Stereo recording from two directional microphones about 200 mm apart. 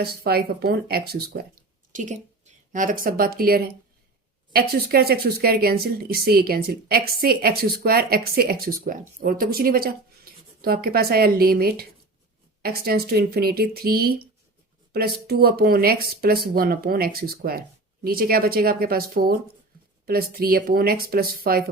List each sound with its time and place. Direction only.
0.0 s speech: 50° right (ahead or behind)
1.9 s speech: 35° right (ahead or behind)